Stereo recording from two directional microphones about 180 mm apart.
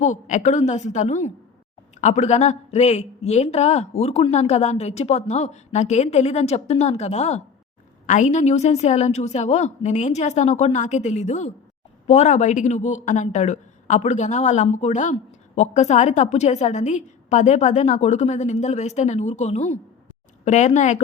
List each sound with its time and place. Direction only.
0.0 s a woman's voice: 40° left (ahead or behind)